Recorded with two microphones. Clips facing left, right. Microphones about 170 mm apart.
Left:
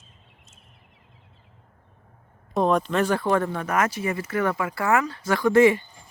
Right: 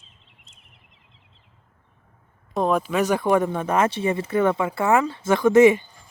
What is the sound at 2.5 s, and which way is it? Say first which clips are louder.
Speech: even; centre (ahead or behind).